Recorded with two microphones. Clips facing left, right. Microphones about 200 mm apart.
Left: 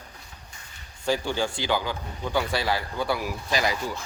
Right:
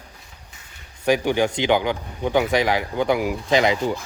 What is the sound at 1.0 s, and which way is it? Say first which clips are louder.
Speech: right 7 dB; 15° right (ahead or behind).